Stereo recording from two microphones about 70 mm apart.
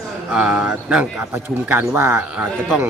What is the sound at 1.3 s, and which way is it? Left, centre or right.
Speech, right.